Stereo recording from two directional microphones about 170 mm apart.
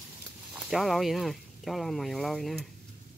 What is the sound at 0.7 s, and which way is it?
Speech, centre (ahead or behind).